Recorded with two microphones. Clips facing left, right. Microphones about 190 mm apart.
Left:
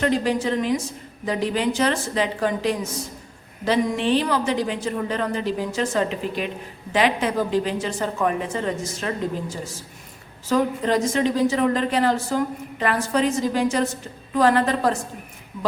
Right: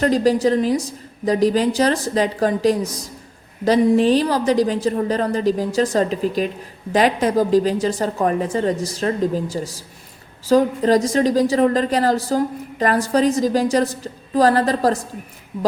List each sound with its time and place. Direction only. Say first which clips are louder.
0.0 s a woman's voice: right 5 dB; 40° right (ahead or behind)